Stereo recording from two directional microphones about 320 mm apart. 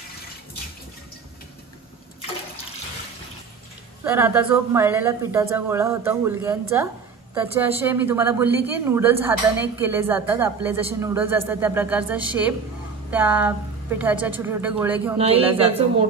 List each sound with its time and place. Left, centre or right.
4.0 s a woman's voice: centre
15.1 s speech: centre